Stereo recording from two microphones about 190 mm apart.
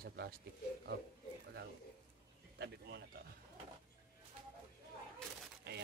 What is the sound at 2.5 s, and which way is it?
Speech, 65° right (ahead or behind).